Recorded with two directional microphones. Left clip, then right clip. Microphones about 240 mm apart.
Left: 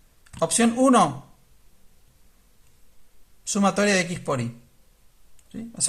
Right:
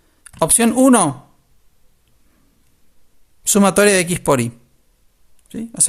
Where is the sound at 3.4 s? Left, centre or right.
Right.